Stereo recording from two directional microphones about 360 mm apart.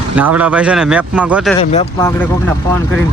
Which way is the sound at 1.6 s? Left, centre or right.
Centre.